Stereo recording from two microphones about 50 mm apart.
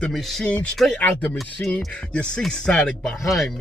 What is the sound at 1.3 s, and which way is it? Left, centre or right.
Speech, centre.